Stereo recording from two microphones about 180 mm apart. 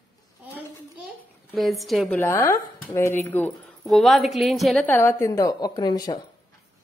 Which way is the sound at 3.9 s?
Centre (ahead or behind).